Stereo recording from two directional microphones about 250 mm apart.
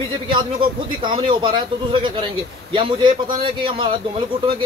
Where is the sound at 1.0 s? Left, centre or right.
Centre.